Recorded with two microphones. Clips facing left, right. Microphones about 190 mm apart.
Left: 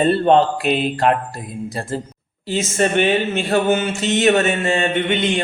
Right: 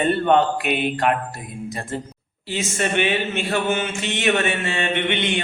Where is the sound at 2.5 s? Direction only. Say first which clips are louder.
Left 5 dB; 40° left (ahead or behind).